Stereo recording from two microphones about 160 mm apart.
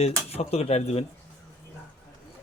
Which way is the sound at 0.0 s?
40° left (ahead or behind).